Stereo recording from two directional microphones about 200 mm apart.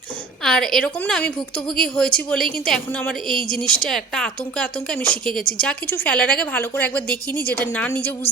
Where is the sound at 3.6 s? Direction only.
5° left (ahead or behind).